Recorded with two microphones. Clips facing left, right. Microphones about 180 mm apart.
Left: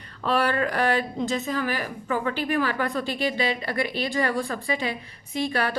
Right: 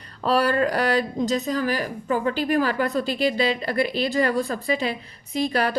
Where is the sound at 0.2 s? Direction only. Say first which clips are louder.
Right 3 dB; 40° right (ahead or behind).